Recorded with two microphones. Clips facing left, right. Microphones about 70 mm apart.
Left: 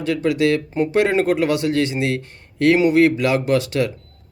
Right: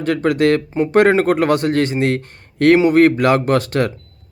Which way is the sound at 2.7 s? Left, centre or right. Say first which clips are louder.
Right 3 dB; right.